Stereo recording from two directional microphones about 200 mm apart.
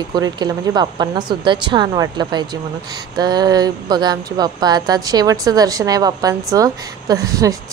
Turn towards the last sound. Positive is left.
turn(degrees=-15)  # may be behind; listen again after turning